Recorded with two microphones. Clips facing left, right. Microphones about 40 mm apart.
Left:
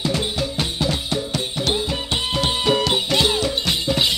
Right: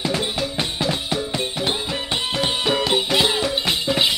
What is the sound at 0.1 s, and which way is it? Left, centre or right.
Drum, centre.